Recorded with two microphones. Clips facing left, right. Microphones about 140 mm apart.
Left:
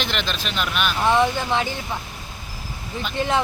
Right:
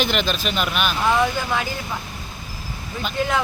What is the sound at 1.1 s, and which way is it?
Speech, 25° left (ahead or behind).